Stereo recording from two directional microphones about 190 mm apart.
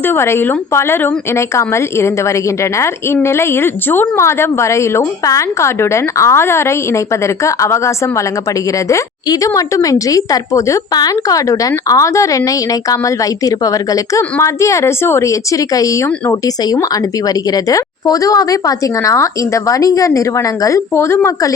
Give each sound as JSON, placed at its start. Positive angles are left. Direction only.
{"t": 0.0, "sound": "a woman's voice", "side_deg": 10}